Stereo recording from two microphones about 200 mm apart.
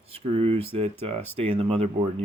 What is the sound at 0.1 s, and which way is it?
Speech, 30° right (ahead or behind).